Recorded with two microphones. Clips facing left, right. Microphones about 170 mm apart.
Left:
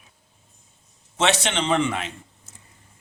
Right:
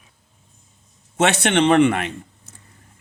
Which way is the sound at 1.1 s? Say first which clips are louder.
Right 5 dB; 55° right (ahead or behind).